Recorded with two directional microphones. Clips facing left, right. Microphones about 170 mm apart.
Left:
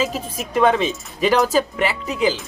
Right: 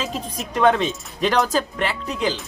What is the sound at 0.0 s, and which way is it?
Speech, 5° left (ahead or behind).